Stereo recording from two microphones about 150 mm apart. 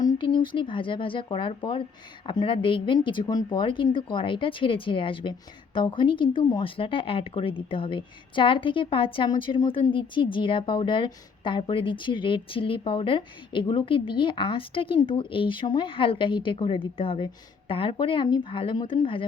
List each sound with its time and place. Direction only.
0.0 s speech: 30° left (ahead or behind)